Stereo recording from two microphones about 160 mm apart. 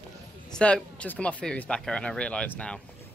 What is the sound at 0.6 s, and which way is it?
Speech, 10° left (ahead or behind).